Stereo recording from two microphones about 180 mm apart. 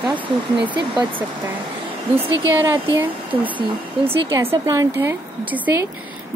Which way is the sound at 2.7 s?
10° right (ahead or behind).